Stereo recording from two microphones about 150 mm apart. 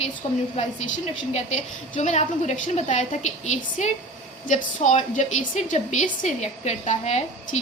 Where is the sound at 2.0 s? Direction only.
50° left (ahead or behind).